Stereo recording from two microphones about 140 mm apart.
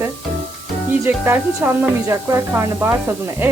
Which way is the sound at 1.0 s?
15° right (ahead or behind).